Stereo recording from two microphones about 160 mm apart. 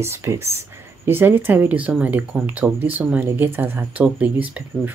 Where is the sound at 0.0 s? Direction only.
15° right (ahead or behind).